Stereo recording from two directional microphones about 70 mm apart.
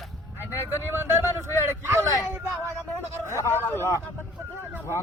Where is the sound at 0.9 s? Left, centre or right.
Right.